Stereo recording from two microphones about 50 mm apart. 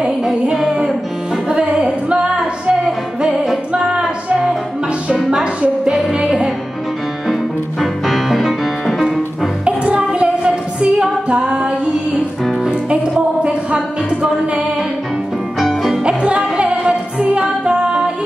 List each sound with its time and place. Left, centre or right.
0.2 s music: centre
1.5 s music: centre
3.7 s music: centre
7.8 s music: centre
9.7 s music: right
12.9 s music: right
15.6 s music: centre
16.0 s music: centre